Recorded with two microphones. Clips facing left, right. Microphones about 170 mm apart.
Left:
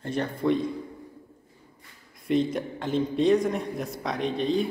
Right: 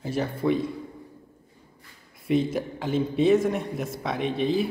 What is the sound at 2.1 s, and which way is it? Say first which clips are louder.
A man's voice: right 1 dB; centre (ahead or behind).